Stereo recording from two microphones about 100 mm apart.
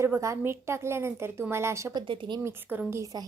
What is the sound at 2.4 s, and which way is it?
Speech, 20° right (ahead or behind).